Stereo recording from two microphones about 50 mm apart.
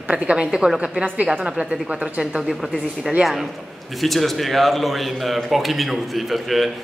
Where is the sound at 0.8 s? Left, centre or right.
Right.